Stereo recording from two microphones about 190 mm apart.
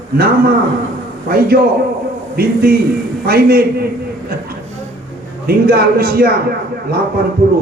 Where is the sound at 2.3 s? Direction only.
55° right (ahead or behind).